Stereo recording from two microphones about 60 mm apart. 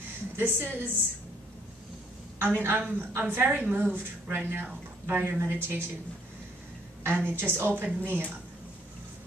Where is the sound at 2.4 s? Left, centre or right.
Right.